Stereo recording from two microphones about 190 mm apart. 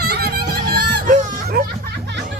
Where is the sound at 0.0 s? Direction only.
55° right (ahead or behind).